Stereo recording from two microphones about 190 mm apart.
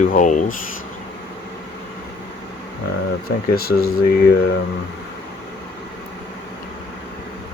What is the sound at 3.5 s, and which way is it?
Speech, 50° left (ahead or behind).